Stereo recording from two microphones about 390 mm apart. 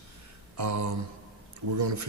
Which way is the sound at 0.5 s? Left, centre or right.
Right.